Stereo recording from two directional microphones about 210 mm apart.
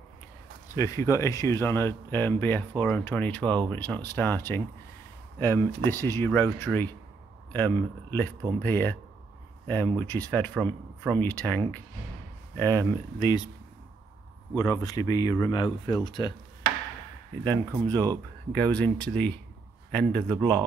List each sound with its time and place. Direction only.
0.7 s speech: 15° left (ahead or behind)
14.6 s speech: 15° left (ahead or behind)
17.5 s speech: 10° left (ahead or behind)